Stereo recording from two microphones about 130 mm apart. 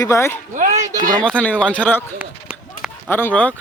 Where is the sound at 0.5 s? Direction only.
75° right (ahead or behind).